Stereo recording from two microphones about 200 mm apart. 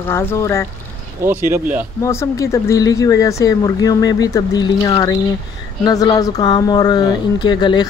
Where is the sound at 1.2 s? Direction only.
10° right (ahead or behind).